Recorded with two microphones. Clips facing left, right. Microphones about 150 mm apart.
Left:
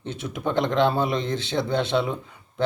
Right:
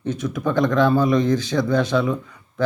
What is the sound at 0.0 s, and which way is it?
Speech, 25° left (ahead or behind).